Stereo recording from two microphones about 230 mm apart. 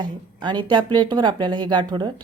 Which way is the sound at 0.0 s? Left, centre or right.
Centre.